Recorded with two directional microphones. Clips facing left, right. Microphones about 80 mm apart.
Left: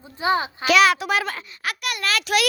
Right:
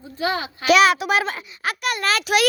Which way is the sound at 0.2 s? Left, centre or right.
Left.